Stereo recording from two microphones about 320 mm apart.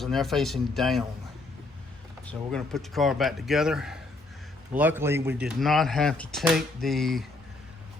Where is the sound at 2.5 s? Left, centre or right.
Centre.